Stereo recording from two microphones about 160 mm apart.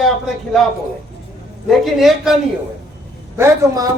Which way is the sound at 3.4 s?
20° right (ahead or behind).